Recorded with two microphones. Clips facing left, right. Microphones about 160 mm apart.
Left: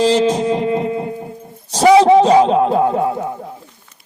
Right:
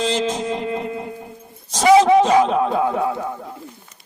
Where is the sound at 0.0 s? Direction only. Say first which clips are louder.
Left 7 dB; 35° left (ahead or behind).